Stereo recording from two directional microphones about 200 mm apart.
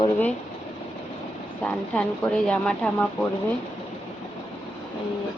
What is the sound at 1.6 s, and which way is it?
A woman's voice, 5° left (ahead or behind).